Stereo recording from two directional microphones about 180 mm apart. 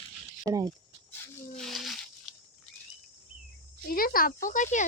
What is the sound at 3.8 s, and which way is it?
Speech, 55° left (ahead or behind).